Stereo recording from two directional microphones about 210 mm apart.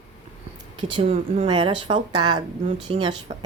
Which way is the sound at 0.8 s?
25° right (ahead or behind).